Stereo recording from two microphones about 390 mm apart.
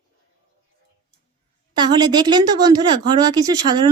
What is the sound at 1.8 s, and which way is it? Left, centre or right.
Speech, centre.